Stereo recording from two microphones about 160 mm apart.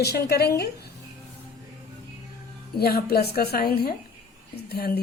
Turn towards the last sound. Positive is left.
turn(degrees=75)  # may be behind; listen again after turning